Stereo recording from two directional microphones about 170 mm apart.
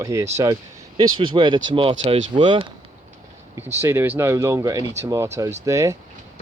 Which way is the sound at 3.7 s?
15° right (ahead or behind).